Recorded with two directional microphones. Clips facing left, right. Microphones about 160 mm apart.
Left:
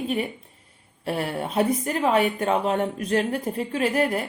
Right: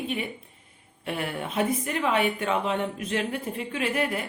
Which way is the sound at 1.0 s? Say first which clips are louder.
Left 4 dB; 35° left (ahead or behind).